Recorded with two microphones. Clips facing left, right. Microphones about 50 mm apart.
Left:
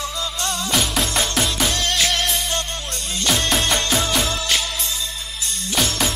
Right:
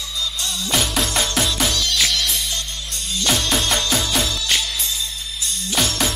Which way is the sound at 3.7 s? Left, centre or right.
Left.